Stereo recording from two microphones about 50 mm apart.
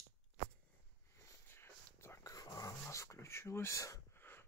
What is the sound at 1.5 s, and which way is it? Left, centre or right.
Whispering, left.